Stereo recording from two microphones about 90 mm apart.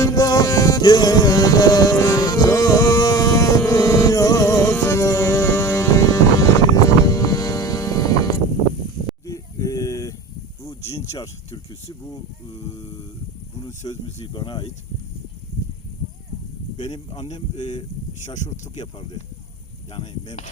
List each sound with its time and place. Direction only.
0.0 s music: 45° left (ahead or behind)
9.2 s a sound: 40° left (ahead or behind)
14.0 s speech: 55° left (ahead or behind)
18.3 s speech: 55° left (ahead or behind)